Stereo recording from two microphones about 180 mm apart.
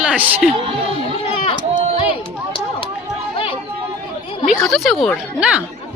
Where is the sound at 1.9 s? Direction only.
30° left (ahead or behind).